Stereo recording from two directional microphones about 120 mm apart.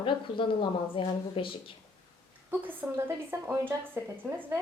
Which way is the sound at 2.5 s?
15° right (ahead or behind).